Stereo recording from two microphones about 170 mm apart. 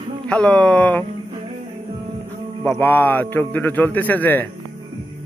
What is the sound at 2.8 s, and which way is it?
Speech, 10° left (ahead or behind).